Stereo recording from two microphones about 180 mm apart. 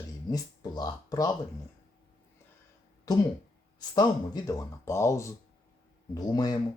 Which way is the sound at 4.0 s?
20° left (ahead or behind).